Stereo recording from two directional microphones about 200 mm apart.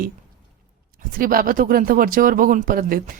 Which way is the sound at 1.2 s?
45° right (ahead or behind).